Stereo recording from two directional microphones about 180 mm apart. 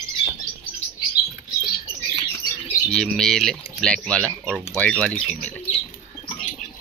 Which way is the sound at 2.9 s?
5° left (ahead or behind).